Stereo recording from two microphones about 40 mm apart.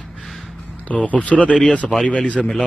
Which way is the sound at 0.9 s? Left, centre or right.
Left.